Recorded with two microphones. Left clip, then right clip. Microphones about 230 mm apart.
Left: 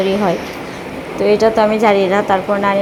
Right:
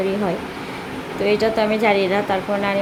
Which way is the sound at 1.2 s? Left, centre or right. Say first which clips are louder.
Left 6 dB; centre.